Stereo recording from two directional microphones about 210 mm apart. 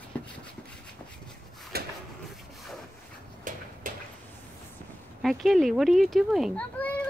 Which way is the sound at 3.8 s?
40° right (ahead or behind).